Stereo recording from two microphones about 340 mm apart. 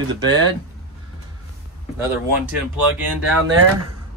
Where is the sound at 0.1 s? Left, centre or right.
Centre.